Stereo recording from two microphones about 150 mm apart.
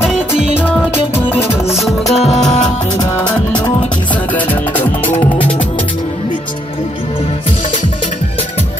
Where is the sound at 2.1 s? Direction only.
45° left (ahead or behind).